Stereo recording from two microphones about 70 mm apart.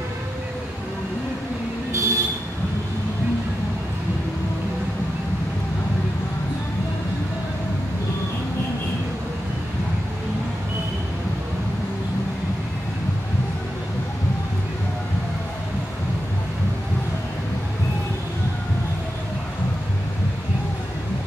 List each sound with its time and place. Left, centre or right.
1.9 s vehicle: right